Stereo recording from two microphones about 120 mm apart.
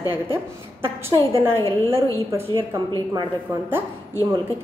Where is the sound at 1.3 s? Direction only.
20° right (ahead or behind).